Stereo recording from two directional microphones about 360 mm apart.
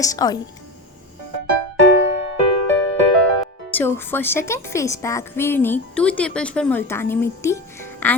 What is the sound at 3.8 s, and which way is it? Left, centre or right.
A woman's voice, centre.